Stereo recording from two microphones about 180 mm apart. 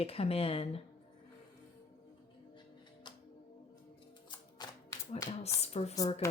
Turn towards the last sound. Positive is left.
turn(degrees=35)  # may be behind; listen again after turning